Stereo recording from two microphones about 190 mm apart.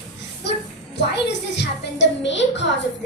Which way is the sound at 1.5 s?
70° left (ahead or behind).